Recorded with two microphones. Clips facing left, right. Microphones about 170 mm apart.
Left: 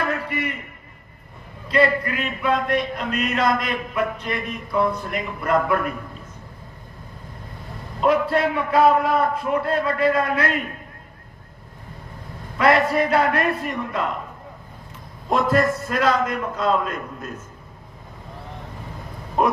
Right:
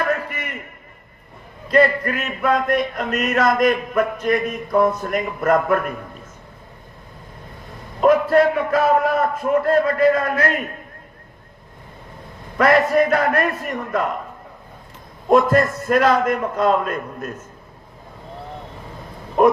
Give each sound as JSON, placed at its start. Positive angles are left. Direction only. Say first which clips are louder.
{"t": 1.6, "sound": "speech", "louder": "right 3 dB", "side_deg": -45}
{"t": 8.0, "sound": "speech", "louder": "right 5 dB", "side_deg": -45}
{"t": 12.5, "sound": "speech", "louder": "right 3 dB", "side_deg": -45}
{"t": 15.3, "sound": "speech", "louder": "right 4 dB", "side_deg": -50}